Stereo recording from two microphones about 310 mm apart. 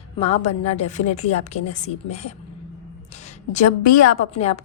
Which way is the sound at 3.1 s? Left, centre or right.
Left.